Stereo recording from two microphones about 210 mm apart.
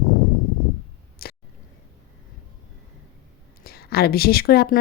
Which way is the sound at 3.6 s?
45° left (ahead or behind).